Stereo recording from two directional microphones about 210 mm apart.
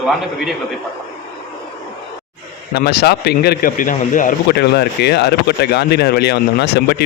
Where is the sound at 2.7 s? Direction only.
50° left (ahead or behind).